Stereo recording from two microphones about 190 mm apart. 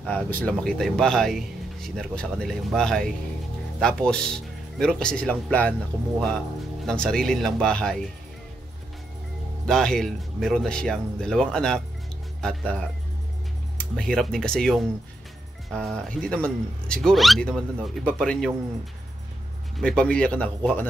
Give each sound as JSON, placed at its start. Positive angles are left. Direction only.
{"t": 0.0, "sound": "speech", "side_deg": 5}
{"t": 9.7, "sound": "speech", "side_deg": 5}
{"t": 19.8, "sound": "speech", "side_deg": 5}